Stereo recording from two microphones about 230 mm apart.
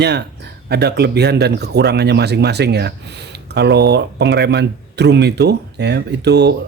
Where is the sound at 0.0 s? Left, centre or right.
Right.